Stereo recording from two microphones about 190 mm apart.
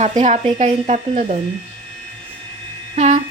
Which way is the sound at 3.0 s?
35° right (ahead or behind).